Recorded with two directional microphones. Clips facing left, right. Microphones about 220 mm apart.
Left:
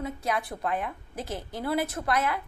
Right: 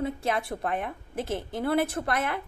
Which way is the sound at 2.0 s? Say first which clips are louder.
Left 1 dB; 50° right (ahead or behind).